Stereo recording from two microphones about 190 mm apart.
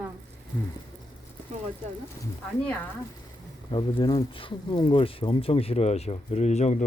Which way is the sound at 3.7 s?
25° left (ahead or behind).